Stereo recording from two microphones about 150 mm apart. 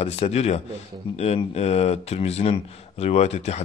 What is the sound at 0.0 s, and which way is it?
A man's voice, 45° left (ahead or behind).